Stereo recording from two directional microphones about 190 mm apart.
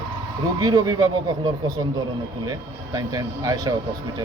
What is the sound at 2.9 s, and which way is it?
Speech, 20° right (ahead or behind).